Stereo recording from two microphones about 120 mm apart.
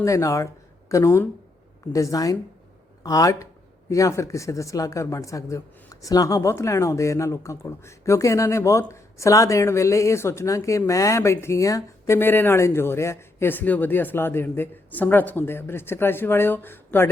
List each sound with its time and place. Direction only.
0.0 s a woman's voice: 25° left (ahead or behind)